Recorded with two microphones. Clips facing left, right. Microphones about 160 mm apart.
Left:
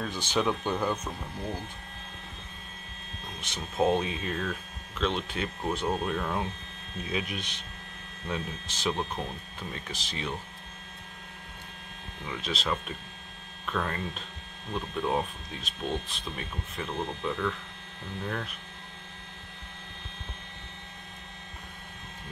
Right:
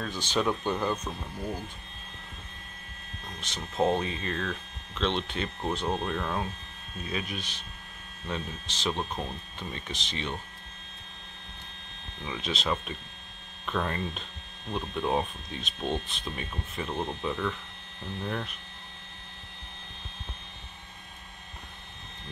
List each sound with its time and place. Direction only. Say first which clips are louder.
0.3 s speech: even; 10° left (ahead or behind)
3.3 s speech: even; 10° left (ahead or behind)
7.1 s speech: left 1 dB; 15° left (ahead or behind)
12.3 s speech: right 1 dB; centre (ahead or behind)
18.2 s speech: right 1 dB; centre (ahead or behind)